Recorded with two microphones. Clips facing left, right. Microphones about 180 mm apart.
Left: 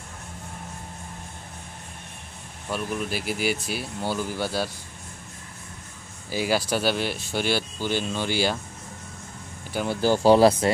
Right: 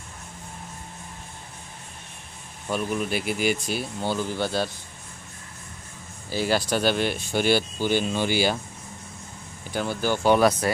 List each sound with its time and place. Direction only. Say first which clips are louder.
2.7 s speech: right 2 dB; centre (ahead or behind)
6.3 s speech: even; 10° left (ahead or behind)
9.8 s speech: left 4 dB; 30° left (ahead or behind)